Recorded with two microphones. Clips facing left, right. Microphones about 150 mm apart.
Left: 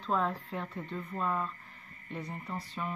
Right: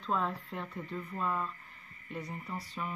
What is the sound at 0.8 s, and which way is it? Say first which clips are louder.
Speech: even; 30° left (ahead or behind).